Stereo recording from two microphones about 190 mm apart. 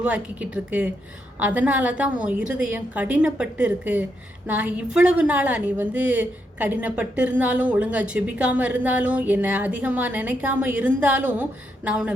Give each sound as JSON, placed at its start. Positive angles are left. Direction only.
{"t": 0.0, "sound": "a woman's voice", "side_deg": -5}